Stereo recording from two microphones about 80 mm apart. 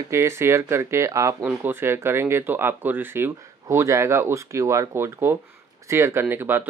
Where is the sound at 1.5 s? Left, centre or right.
Right.